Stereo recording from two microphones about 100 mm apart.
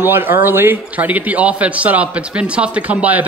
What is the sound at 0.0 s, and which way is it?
A man's voice, 20° right (ahead or behind).